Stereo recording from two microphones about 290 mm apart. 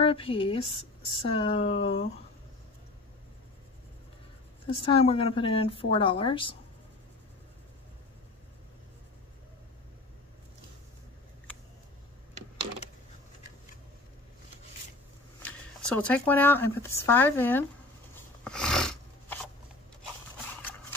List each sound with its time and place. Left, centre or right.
0.0 s a woman's voice: centre
4.6 s a woman's voice: centre
15.4 s speech: centre
18.4 s a sound: centre